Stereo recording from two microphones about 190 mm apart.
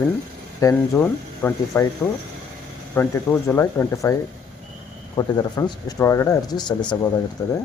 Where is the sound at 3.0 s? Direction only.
10° left (ahead or behind).